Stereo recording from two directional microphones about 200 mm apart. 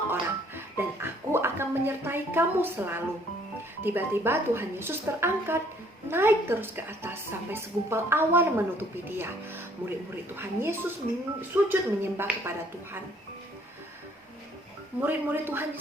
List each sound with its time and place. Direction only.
0.1 s a woman's voice: 10° right (ahead or behind)
15.0 s a woman's voice: 10° right (ahead or behind)